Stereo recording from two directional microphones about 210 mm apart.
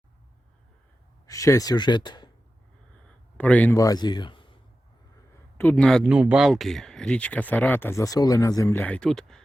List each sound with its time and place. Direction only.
1.3 s speech: 15° left (ahead or behind)
3.3 s a man's voice: 5° left (ahead or behind); by 4.5 s 25° left (ahead or behind)
5.5 s speech: 5° left (ahead or behind)